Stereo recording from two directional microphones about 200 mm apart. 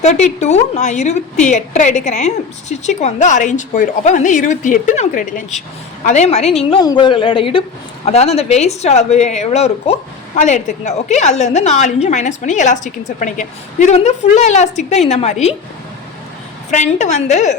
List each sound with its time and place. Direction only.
0.0 s a woman's voice: 35° left (ahead or behind)
16.7 s a woman's voice: 35° left (ahead or behind)